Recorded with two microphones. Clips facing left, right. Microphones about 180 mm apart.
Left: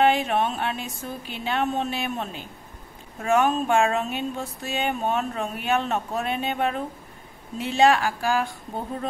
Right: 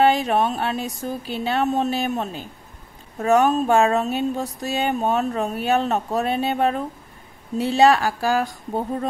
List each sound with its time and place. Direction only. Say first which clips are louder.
0.0 s speech: right 3 dB; 40° right (ahead or behind)